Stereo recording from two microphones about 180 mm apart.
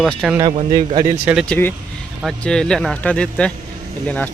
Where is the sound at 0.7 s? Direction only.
25° right (ahead or behind).